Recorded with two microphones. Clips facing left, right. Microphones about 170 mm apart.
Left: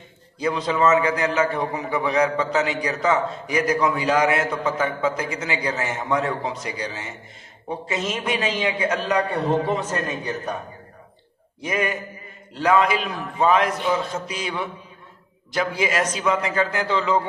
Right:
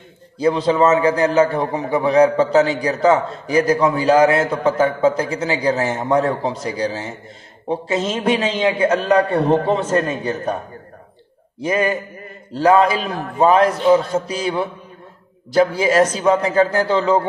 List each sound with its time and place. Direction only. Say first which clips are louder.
0.4 s a man's voice: right 6 dB; 30° right (ahead or behind)
11.6 s a man's voice: right 6 dB; 30° right (ahead or behind)